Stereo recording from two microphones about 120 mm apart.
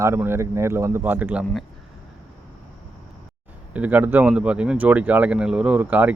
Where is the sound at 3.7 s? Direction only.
10° right (ahead or behind).